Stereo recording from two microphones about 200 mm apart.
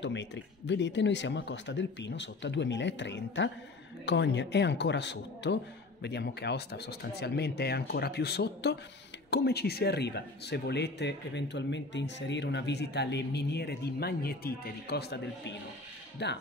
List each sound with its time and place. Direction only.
0.0 s speech: 65° left (ahead or behind)